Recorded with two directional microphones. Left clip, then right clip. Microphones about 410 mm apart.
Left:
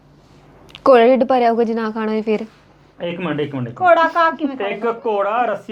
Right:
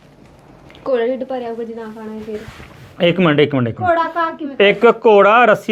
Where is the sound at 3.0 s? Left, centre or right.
Right.